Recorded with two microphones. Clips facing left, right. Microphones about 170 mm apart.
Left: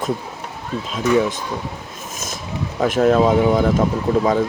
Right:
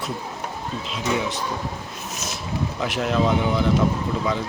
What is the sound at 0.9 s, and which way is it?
Speech, 45° left (ahead or behind).